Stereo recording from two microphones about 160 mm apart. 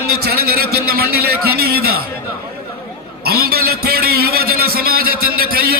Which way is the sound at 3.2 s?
75° right (ahead or behind).